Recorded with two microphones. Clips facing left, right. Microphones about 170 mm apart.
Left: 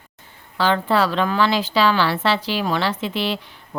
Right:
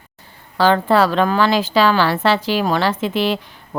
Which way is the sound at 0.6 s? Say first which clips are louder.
Right 4 dB; 45° right (ahead or behind).